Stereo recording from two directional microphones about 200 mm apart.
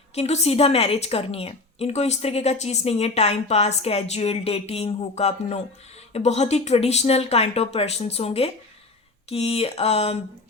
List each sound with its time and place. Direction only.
0.1 s a woman's voice: 30° left (ahead or behind)